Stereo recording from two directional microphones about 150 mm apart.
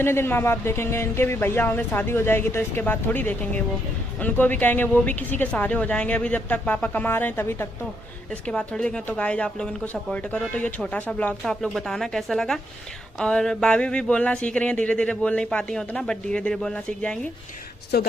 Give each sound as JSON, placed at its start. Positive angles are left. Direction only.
{"t": 0.0, "sound": "speech", "side_deg": 15}
{"t": 17.9, "sound": "speech", "side_deg": 90}